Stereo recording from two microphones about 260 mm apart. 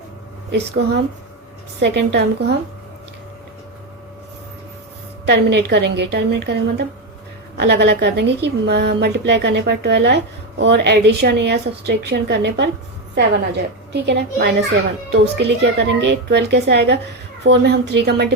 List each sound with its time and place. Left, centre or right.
0.5 s a woman's voice: right
5.2 s a woman's voice: right